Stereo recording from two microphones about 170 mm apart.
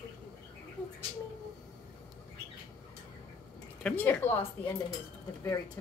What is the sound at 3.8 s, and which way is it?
Speech, 10° left (ahead or behind).